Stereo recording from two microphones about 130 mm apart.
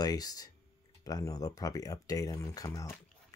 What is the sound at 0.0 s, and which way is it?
Speech, 30° left (ahead or behind).